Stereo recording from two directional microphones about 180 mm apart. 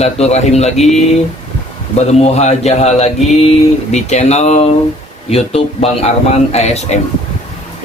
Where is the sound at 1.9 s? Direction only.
40° left (ahead or behind).